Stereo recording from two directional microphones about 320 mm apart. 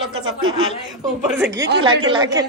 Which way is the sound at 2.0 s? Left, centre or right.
Centre.